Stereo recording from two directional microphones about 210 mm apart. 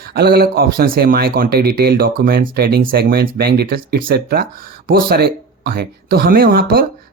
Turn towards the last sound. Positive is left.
turn(degrees=-45)  # may be behind; listen again after turning